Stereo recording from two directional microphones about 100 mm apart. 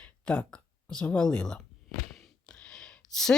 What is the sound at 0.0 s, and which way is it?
Speech, 10° left (ahead or behind).